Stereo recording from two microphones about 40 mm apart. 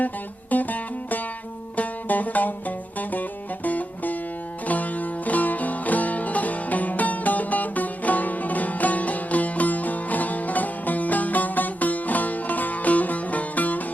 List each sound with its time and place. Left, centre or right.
0.5 s music: left